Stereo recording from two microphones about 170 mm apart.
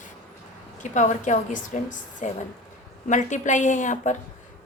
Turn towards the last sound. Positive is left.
turn(degrees=45)  # may be behind; listen again after turning